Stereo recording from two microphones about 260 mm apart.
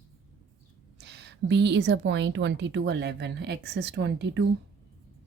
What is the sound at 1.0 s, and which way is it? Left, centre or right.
A woman's voice, right.